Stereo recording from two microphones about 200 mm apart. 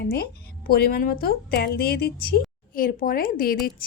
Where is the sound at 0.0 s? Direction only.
50° left (ahead or behind).